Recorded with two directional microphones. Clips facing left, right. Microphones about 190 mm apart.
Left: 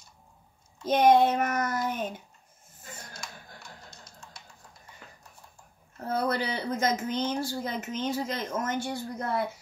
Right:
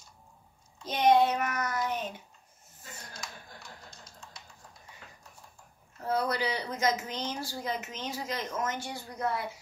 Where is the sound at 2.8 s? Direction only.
50° left (ahead or behind).